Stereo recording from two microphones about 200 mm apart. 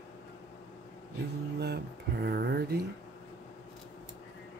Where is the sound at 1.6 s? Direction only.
55° right (ahead or behind).